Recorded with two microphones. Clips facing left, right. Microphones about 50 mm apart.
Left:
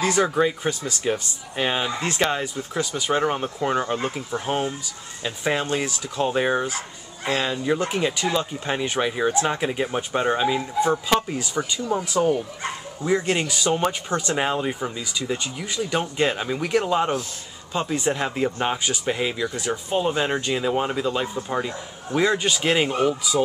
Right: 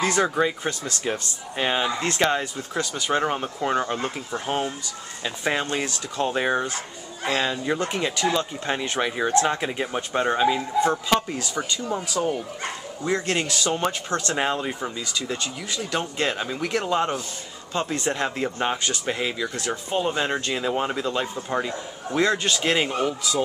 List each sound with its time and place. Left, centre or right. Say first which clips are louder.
0.0 s speech: left 1 dB; centre
7.7 s speech: left 2 dB; centre
12.0 s speech: left 4 dB; left
13.0 s speech: left 2 dB; centre